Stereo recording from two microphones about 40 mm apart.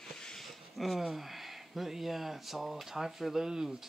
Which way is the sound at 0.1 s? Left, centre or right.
Centre.